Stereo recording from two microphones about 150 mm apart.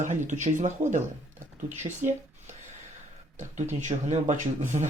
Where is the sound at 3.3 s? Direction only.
55° right (ahead or behind).